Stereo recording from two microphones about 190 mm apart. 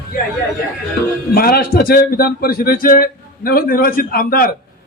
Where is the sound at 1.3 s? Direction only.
50° left (ahead or behind).